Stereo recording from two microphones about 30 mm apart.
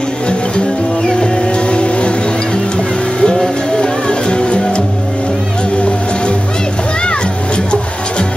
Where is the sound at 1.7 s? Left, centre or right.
Left.